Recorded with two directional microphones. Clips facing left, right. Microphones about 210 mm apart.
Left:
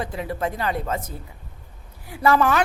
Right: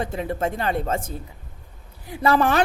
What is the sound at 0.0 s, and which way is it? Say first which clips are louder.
A woman's voice: right 2 dB; 25° right (ahead or behind).